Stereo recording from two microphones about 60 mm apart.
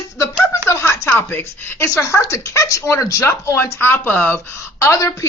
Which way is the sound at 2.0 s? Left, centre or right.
Left.